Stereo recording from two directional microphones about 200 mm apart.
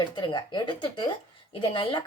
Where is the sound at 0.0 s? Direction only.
20° left (ahead or behind).